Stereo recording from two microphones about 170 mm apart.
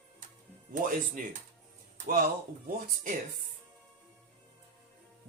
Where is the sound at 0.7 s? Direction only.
50° right (ahead or behind).